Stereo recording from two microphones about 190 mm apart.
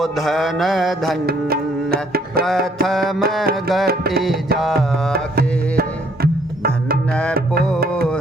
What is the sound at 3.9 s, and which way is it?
Music, 55° right (ahead or behind).